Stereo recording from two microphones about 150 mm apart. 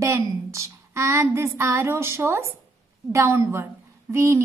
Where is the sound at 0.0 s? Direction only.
20° right (ahead or behind).